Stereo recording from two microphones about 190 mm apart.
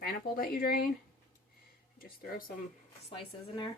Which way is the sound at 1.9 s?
50° left (ahead or behind).